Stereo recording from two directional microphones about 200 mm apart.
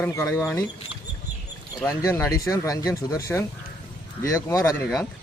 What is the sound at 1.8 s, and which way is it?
A man's voice, 15° left (ahead or behind).